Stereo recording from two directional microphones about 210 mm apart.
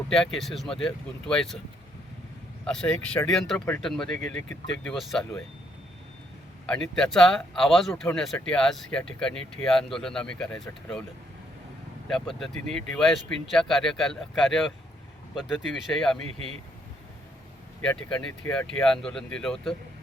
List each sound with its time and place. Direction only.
0.1 s speech: centre (ahead or behind)
2.6 s speech: 5° left (ahead or behind)
6.9 s speech: centre (ahead or behind)
12.4 s speech: 5° left (ahead or behind)
17.8 s speech: 5° left (ahead or behind)